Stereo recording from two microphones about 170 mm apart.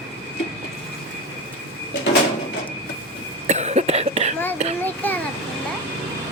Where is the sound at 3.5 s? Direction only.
40° right (ahead or behind).